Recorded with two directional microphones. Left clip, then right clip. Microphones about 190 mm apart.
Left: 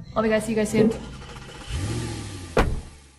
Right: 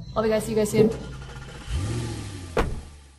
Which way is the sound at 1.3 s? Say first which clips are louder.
Left 2 dB; centre (ahead or behind).